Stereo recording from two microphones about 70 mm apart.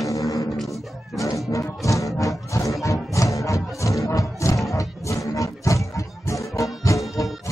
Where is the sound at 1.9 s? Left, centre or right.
Left.